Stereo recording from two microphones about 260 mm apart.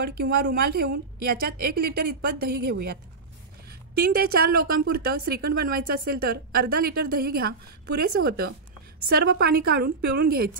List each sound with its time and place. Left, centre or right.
0.0 s a woman's voice: right
4.0 s a woman's voice: right